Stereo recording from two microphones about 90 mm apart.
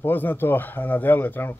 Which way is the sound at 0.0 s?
20° left (ahead or behind).